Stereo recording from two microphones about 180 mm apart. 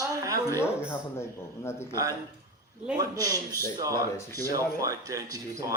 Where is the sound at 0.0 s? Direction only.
20° right (ahead or behind).